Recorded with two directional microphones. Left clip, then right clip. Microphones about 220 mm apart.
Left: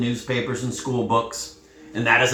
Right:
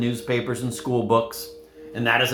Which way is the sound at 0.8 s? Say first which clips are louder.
Right 1 dB; 50° right (ahead or behind).